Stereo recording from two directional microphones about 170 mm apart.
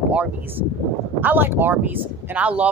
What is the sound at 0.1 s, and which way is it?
Speech, 10° right (ahead or behind).